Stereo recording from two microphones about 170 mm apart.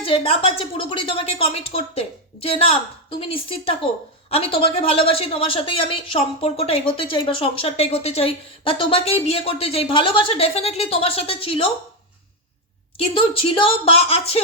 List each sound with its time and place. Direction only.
0.0 s a woman's voice: 35° left (ahead or behind)
13.0 s a woman's voice: 35° left (ahead or behind)